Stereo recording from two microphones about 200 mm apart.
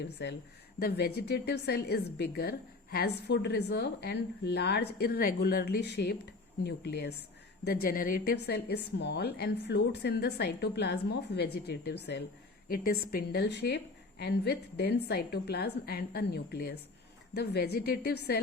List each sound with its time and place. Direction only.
0.0 s a woman's voice: 60° left (ahead or behind)